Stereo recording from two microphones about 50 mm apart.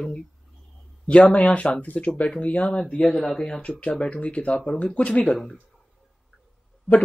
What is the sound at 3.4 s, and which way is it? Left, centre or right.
Speech, centre.